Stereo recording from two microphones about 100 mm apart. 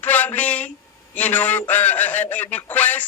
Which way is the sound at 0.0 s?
15° left (ahead or behind).